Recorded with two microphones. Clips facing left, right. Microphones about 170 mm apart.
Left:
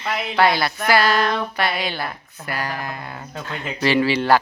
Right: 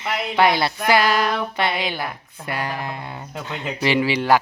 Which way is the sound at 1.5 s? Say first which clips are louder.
Even; 20° right (ahead or behind).